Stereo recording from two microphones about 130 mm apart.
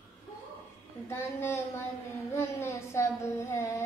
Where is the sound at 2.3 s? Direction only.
20° left (ahead or behind).